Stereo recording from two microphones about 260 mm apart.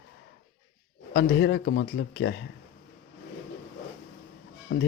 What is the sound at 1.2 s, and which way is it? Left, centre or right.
Speech, left.